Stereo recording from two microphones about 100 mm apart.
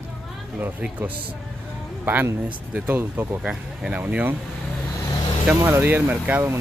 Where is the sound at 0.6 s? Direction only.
15° right (ahead or behind).